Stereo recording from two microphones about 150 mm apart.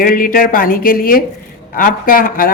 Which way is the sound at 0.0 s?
70° left (ahead or behind).